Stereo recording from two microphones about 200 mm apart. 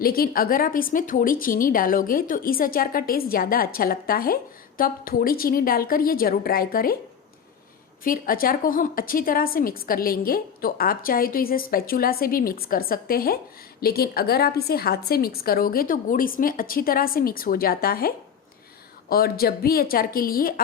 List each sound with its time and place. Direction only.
0.0 s a woman's voice: 50° left (ahead or behind)
8.0 s a woman's voice: 45° left (ahead or behind)